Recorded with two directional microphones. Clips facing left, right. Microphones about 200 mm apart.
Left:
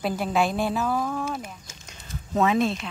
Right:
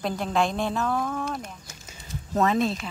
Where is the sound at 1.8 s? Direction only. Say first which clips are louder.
Right 1 dB; centre (ahead or behind).